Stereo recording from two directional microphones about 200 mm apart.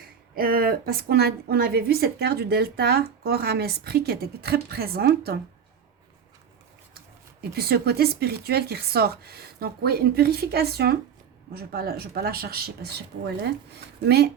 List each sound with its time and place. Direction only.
0.3 s speech: 50° right (ahead or behind)
7.5 s speech: 50° right (ahead or behind)